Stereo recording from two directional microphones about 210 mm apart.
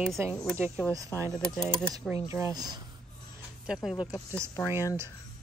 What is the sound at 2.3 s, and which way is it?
Speech, 15° right (ahead or behind).